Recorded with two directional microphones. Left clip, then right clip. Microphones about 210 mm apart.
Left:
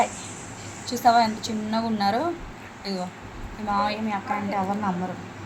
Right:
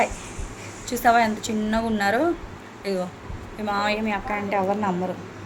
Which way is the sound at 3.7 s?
45° right (ahead or behind).